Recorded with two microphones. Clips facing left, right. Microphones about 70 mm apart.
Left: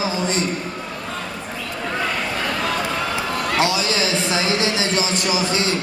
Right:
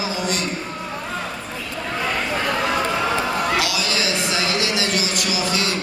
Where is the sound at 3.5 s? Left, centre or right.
Left.